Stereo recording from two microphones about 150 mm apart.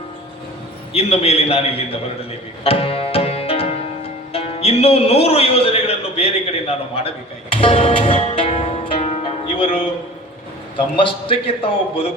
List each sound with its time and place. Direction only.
0.9 s a man's voice: 40° left (ahead or behind)
2.6 s music: 40° left (ahead or behind)
10.9 s a man's voice: 35° left (ahead or behind)